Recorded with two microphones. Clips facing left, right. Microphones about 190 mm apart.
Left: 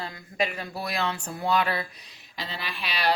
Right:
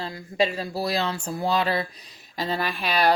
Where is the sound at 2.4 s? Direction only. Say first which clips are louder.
Right 9 dB; 45° right (ahead or behind).